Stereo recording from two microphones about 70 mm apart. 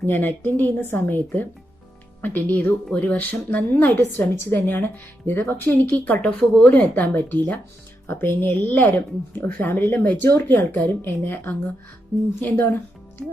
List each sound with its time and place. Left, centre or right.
0.0 s a woman's voice: left
6.5 s a woman's voice: centre